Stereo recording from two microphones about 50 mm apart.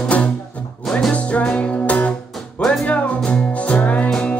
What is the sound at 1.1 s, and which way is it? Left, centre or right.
Music, left.